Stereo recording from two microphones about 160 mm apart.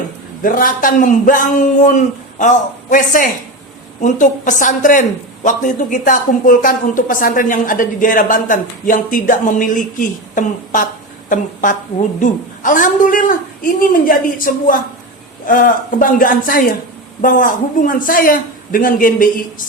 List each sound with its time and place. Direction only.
0.4 s a woman's voice: 60° left (ahead or behind)